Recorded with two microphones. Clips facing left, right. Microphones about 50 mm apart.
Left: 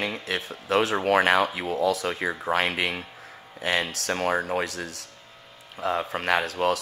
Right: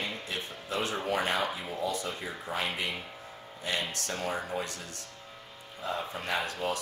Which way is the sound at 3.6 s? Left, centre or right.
Left.